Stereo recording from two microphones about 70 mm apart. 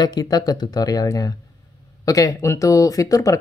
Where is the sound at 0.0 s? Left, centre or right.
Left.